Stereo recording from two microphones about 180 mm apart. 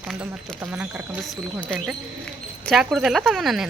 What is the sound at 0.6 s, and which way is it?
Speech, 10° right (ahead or behind).